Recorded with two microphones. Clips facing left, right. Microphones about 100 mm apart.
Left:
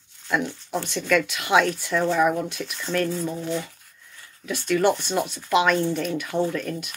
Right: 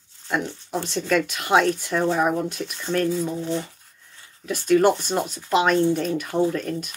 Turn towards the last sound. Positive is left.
turn(degrees=-35)  # may be behind; listen again after turning